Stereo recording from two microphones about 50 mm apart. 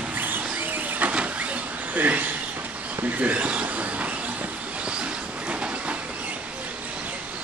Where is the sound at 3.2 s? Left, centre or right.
Right.